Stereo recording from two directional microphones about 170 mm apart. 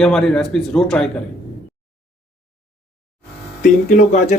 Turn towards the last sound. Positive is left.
turn(degrees=50)  # may be behind; listen again after turning